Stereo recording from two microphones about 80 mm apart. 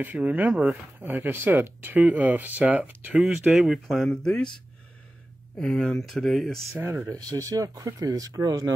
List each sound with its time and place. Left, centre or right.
0.0 s speech: right
3.3 s speech: centre
5.6 s speech: centre
6.7 s speech: right